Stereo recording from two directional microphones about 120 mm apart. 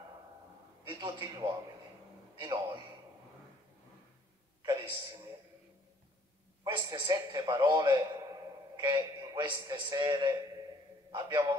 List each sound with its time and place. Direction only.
0.8 s a man's voice: 40° right (ahead or behind)
4.6 s a sound: 35° right (ahead or behind)
6.6 s a man's voice: 35° right (ahead or behind)